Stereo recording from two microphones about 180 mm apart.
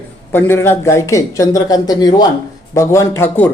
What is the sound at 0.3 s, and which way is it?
Speech, 10° left (ahead or behind).